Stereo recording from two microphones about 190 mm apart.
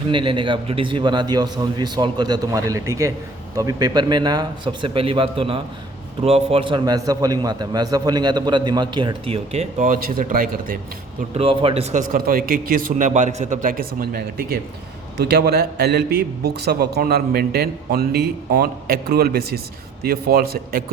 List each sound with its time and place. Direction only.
0.1 s a man's voice: 25° right (ahead or behind); by 10.8 s 50° right (ahead or behind)
11.3 s a man's voice: 30° right (ahead or behind); by 20.8 s 55° right (ahead or behind)